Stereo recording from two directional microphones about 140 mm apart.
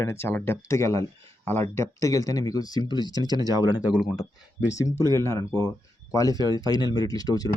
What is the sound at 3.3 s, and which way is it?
Speech, 25° right (ahead or behind).